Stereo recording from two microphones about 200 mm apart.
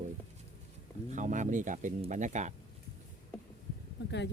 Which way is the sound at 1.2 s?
40° right (ahead or behind).